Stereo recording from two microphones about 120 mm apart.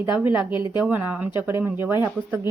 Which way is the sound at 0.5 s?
40° left (ahead or behind).